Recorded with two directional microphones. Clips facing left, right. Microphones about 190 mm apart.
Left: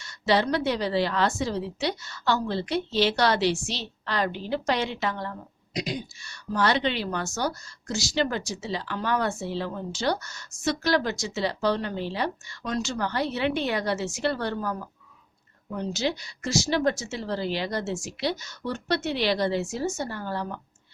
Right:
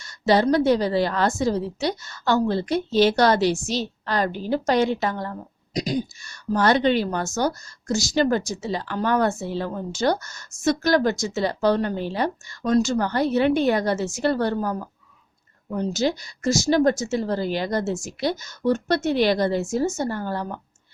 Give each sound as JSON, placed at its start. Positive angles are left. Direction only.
{"t": 0.0, "sound": "a woman's voice", "side_deg": -45}